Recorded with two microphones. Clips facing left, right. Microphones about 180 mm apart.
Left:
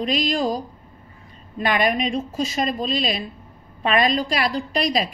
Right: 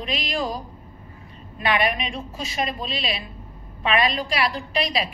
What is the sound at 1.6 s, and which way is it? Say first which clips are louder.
A woman's voice: left 3 dB; 45° left (ahead or behind).